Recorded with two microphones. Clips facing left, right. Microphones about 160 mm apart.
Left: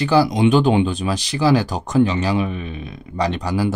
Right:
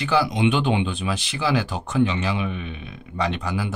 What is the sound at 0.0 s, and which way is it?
Speech, 35° left (ahead or behind).